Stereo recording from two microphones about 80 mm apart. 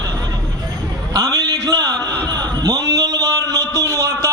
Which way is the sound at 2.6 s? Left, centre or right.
Right.